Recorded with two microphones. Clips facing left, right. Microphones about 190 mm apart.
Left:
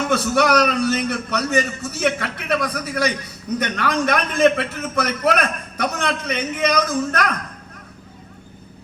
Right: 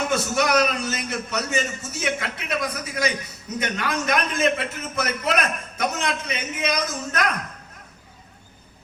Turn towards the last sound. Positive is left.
turn(degrees=60)  # may be behind; listen again after turning